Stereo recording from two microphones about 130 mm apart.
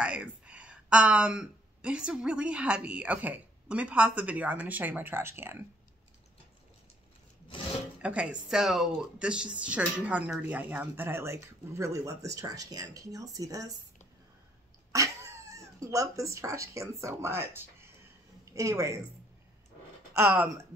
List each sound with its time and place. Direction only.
0.0 s speech: 10° right (ahead or behind)
8.0 s speech: 10° right (ahead or behind); by 13.7 s 25° right (ahead or behind)
14.9 s cat: 25° right (ahead or behind)
15.8 s speech: 25° right (ahead or behind)